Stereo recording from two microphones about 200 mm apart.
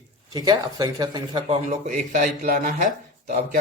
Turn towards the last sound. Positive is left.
turn(degrees=-40)  # may be behind; listen again after turning